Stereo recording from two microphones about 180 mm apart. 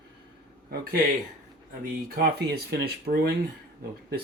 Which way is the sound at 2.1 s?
60° right (ahead or behind).